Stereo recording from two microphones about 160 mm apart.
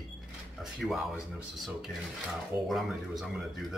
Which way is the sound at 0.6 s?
Centre (ahead or behind).